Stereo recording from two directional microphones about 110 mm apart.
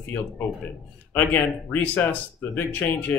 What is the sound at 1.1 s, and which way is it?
Speech, 15° left (ahead or behind).